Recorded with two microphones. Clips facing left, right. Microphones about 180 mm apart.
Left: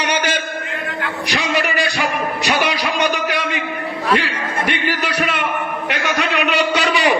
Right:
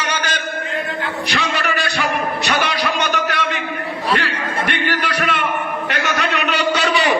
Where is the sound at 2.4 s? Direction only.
Centre (ahead or behind).